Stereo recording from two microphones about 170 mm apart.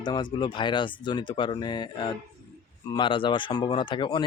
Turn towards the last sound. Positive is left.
turn(degrees=25)  # may be behind; listen again after turning